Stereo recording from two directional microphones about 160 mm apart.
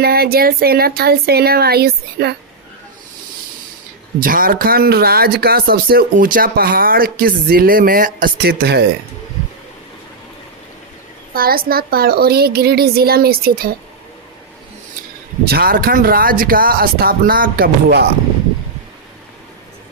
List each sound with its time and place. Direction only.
0.0 s speech: 75° right (ahead or behind)
4.2 s speech: 60° right (ahead or behind); by 8.8 s 85° right
11.3 s speech: 70° right (ahead or behind)
15.4 s speech: 75° right (ahead or behind)